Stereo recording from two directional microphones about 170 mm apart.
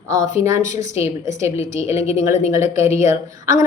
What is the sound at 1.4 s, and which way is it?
A woman's voice, 20° right (ahead or behind).